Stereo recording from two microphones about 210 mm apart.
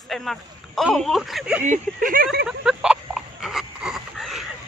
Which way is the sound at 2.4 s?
Centre (ahead or behind).